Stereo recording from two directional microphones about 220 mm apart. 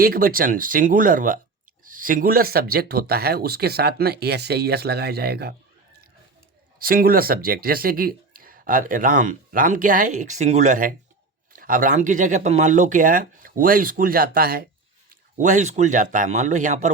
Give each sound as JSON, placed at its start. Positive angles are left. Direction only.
{"t": 0.0, "sound": "speech", "side_deg": -40}
{"t": 6.7, "sound": "speech", "side_deg": -40}